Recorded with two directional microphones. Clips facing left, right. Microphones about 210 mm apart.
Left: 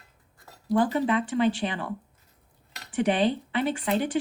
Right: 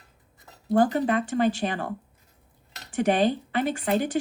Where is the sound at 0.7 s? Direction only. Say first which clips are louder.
Right 2 dB; 45° right (ahead or behind).